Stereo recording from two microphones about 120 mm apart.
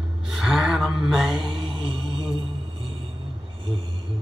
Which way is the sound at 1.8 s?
45° right (ahead or behind).